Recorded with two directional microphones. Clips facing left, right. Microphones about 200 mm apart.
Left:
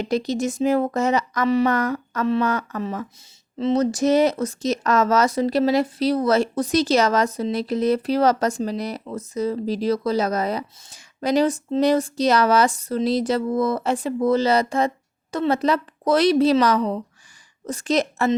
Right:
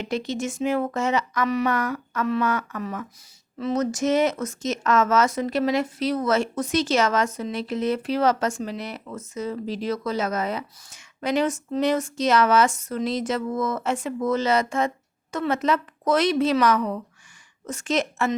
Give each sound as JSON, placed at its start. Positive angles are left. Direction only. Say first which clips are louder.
{"t": 0.0, "sound": "speech", "louder": "left 5 dB", "side_deg": 35}
{"t": 2.8, "sound": "speech", "louder": "left 3 dB", "side_deg": 25}